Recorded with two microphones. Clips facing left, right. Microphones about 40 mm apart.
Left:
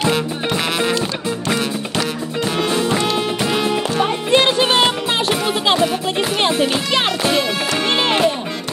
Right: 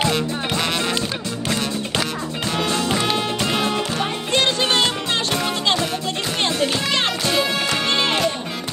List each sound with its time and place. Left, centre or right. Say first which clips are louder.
2.5 s music: left 2 dB; centre
4.3 s music: left 4 dB; centre